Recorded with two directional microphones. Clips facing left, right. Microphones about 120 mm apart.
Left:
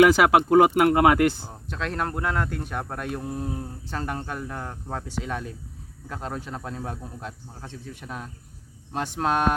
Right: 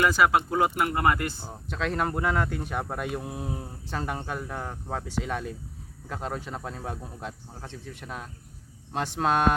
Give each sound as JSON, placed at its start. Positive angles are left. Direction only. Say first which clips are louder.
{"t": 0.0, "sound": "speech", "louder": "left 6 dB", "side_deg": 80}
{"t": 1.5, "sound": "speech", "louder": "right 1 dB", "side_deg": 0}